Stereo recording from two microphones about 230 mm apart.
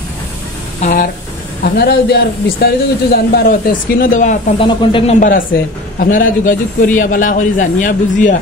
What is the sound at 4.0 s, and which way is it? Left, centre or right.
Speech, left.